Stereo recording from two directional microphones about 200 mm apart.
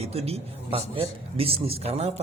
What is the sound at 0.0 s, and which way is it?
A man's voice, 30° right (ahead or behind).